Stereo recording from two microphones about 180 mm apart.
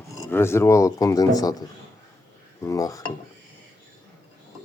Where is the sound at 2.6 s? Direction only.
20° left (ahead or behind).